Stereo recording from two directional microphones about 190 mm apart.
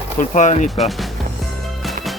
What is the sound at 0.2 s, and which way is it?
Speech, 40° left (ahead or behind).